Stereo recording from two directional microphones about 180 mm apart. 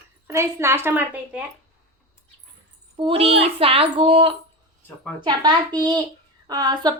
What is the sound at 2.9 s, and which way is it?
A child's voice, 30° right (ahead or behind).